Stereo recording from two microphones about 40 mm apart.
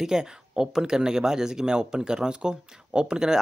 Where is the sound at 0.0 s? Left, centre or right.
Centre.